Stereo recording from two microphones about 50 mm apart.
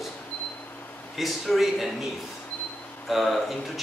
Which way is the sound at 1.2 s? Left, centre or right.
Centre.